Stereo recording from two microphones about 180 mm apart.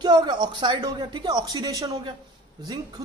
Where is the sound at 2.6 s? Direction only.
20° right (ahead or behind).